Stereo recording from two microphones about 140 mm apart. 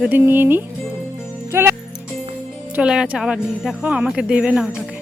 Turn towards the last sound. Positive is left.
turn(degrees=-5)  # may be behind; listen again after turning